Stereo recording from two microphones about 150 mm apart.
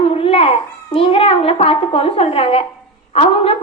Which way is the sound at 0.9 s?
40° left (ahead or behind).